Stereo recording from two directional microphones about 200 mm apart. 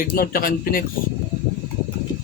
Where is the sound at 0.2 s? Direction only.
45° left (ahead or behind).